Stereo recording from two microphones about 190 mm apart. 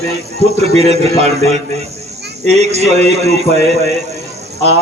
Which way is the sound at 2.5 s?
35° right (ahead or behind).